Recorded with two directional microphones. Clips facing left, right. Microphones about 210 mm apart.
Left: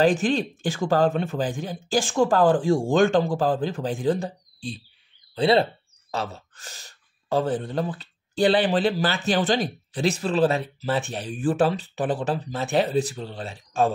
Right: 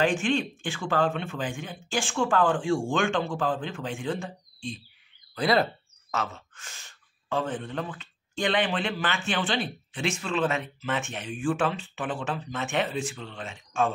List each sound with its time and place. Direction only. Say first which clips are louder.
0.0 s speech: left 4 dB; 35° left (ahead or behind)